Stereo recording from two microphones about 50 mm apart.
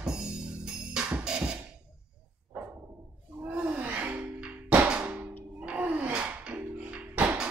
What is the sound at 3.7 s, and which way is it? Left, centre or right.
Gasp, right.